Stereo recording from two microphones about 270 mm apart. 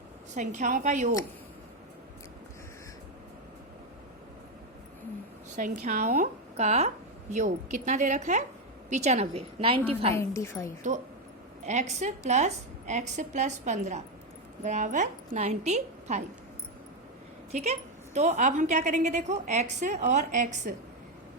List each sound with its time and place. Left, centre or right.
0.3 s a woman's voice: right
5.5 s a woman's voice: right
10.2 s a woman's voice: centre
11.6 s a woman's voice: right
17.5 s a woman's voice: right